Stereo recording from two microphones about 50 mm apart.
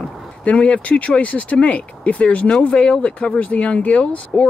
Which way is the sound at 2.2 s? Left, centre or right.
Centre.